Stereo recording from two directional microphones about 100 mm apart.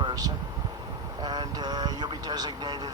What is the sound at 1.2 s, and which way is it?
Speech, 45° right (ahead or behind).